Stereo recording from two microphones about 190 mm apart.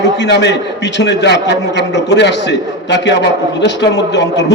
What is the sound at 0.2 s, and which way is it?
A man's voice, 65° left (ahead or behind).